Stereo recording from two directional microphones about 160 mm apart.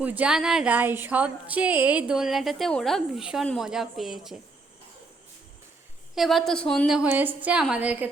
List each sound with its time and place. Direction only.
0.0 s speech: 10° right (ahead or behind)
6.1 s speech: centre (ahead or behind)